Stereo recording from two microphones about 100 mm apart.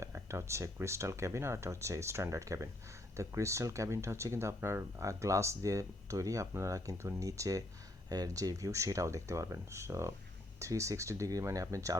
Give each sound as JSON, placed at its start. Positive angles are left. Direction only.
{"t": 0.0, "sound": "speech", "side_deg": -30}